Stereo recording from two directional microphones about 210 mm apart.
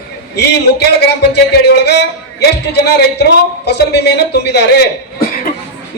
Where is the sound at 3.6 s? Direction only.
55° left (ahead or behind).